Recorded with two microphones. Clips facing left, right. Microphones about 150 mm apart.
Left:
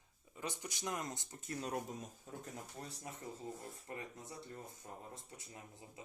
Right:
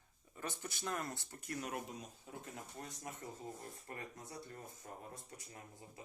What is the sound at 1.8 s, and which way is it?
Speech, 45° left (ahead or behind).